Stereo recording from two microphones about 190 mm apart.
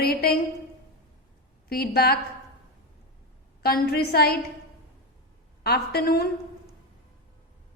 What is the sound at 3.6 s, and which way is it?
Speech, 55° left (ahead or behind).